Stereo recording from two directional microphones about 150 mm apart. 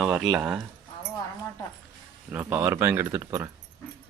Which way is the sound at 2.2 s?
15° right (ahead or behind).